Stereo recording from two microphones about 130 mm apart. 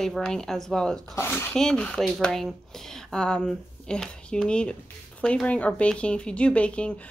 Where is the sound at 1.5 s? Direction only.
5° left (ahead or behind).